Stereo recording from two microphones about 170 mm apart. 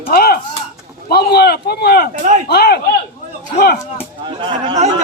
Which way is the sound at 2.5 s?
65° left (ahead or behind).